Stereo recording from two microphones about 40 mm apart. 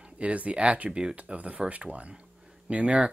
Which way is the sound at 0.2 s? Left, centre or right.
Right.